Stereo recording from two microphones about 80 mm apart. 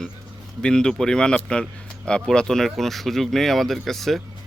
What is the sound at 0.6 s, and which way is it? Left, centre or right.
Speech, centre.